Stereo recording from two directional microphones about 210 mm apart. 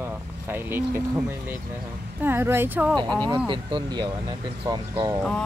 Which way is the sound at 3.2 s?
25° right (ahead or behind).